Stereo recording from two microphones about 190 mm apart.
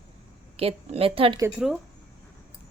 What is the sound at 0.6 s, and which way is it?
Speech, 30° right (ahead or behind).